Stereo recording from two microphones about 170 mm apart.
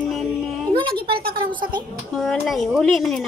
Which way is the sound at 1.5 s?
25° right (ahead or behind).